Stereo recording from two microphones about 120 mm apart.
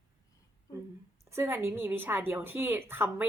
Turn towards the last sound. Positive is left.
turn(degrees=-20)  # may be behind; listen again after turning